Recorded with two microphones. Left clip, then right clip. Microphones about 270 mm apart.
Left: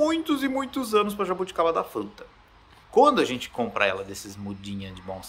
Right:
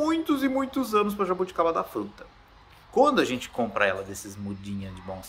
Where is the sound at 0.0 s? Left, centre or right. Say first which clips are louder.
Left 1 dB; centre.